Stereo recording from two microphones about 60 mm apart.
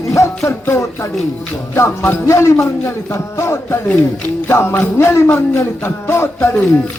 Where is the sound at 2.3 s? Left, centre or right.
Left.